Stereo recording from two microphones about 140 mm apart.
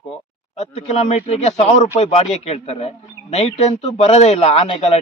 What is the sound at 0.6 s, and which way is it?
A man's voice, 50° left (ahead or behind).